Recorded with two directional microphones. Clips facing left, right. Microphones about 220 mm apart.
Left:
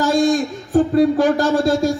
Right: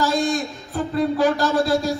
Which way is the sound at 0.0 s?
45° left (ahead or behind).